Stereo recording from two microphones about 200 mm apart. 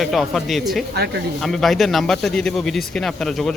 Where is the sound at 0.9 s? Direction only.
55° right (ahead or behind).